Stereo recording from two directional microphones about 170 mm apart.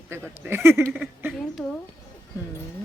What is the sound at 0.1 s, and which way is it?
Speech, 15° right (ahead or behind).